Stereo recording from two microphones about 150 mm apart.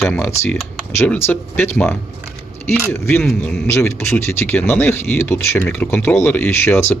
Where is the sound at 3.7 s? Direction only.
15° left (ahead or behind).